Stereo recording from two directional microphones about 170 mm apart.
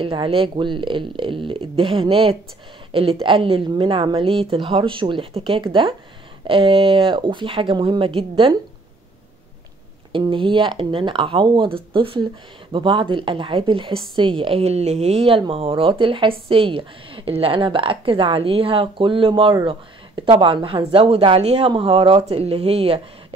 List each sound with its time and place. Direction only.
0.0 s a woman's voice: 30° right (ahead or behind)
10.1 s a woman's voice: 30° right (ahead or behind)